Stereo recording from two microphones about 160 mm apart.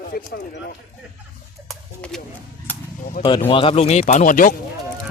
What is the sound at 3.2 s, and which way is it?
Speech, 60° left (ahead or behind).